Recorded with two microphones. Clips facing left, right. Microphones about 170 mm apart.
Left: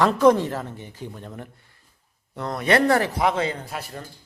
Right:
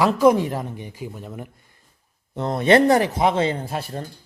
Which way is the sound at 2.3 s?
25° right (ahead or behind).